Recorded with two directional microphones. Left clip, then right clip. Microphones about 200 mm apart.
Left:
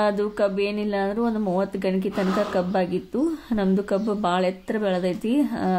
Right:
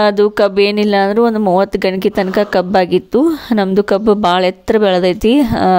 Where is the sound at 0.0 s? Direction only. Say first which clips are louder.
Right 11 dB; 45° right (ahead or behind).